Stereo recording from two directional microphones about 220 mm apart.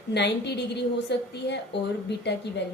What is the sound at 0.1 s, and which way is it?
A woman's voice, 50° left (ahead or behind).